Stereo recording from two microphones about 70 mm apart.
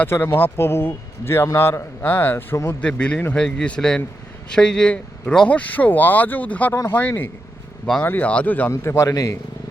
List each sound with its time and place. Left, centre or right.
0.0 s speech: left
2.8 s speech: centre
8.7 s a man's voice: left